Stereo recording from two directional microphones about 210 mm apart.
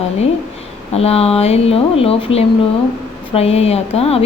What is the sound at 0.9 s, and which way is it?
Speech, 30° left (ahead or behind).